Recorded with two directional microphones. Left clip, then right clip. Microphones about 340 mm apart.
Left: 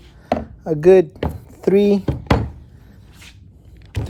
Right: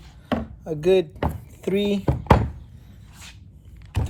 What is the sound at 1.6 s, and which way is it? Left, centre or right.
Speech, left.